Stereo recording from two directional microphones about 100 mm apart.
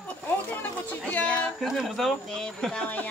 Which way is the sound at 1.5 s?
Centre (ahead or behind).